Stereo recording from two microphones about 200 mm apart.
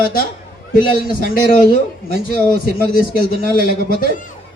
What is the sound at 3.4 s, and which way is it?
Speech, 45° left (ahead or behind).